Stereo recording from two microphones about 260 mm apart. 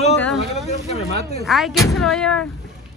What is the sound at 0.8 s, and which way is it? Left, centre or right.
Speech, left.